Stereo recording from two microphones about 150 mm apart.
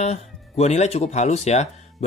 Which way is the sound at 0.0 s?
50° left (ahead or behind).